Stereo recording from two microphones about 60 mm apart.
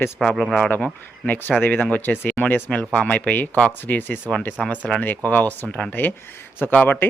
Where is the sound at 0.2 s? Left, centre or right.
Centre; by 4.2 s left.